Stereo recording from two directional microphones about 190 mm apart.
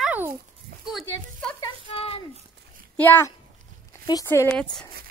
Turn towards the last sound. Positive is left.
turn(degrees=5)  # may be behind; listen again after turning